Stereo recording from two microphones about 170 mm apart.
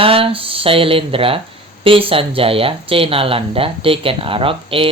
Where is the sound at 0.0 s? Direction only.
35° right (ahead or behind).